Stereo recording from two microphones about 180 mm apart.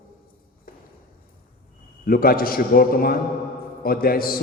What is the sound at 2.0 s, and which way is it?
A man's voice, 55° left (ahead or behind).